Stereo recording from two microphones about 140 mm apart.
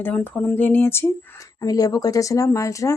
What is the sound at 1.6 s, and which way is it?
A woman's voice, 25° left (ahead or behind).